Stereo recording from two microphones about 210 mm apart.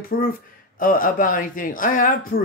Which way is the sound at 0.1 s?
45° left (ahead or behind).